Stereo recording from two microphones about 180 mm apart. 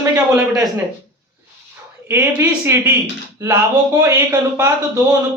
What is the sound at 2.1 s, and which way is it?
A man's voice, 15° right (ahead or behind).